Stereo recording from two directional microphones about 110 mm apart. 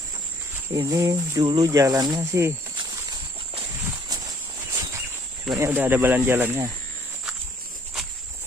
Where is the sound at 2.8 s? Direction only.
50° right (ahead or behind).